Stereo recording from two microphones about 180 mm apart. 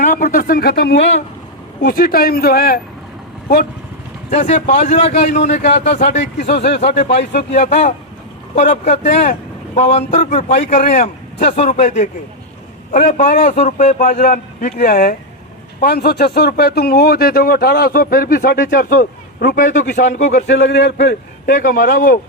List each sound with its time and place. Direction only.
0.0 s a man's voice: 45° left (ahead or behind); by 1.1 s 70° left (ahead or behind)
1.8 s speech: 55° left (ahead or behind)
4.3 s a man's voice: 40° left (ahead or behind)
6.4 s speech: 65° left (ahead or behind)
7.2 s a man's voice: 40° left (ahead or behind)
20.5 s speech: 75° left (ahead or behind); by 22.2 s 55° left (ahead or behind)